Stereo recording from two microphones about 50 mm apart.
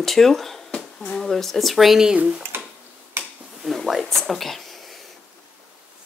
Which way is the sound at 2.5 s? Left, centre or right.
Right.